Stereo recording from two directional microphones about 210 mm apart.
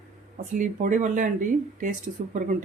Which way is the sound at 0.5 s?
35° right (ahead or behind).